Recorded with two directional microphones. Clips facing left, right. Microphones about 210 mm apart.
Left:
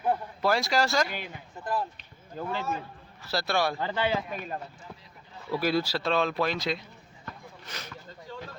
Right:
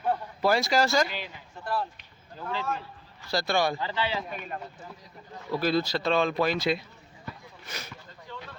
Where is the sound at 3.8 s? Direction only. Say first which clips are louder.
Left 2 dB; 50° left (ahead or behind).